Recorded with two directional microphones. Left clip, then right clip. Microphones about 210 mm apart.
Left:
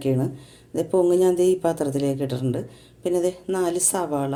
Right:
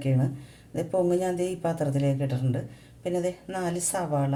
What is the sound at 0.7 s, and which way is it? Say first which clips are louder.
Speech: left 5 dB; 40° left (ahead or behind).